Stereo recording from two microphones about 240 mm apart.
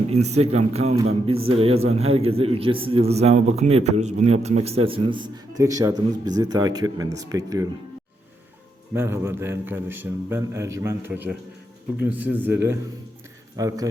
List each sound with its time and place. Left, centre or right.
0.1 s a man's voice: right
8.9 s a man's voice: centre